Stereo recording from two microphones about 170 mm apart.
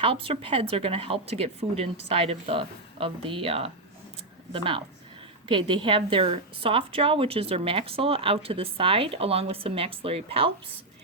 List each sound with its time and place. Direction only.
0.0 s a woman's voice: 35° right (ahead or behind)